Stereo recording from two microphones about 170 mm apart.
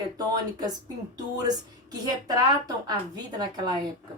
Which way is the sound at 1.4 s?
20° right (ahead or behind).